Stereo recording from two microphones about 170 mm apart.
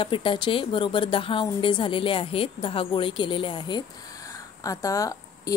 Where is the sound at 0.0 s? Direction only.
30° left (ahead or behind).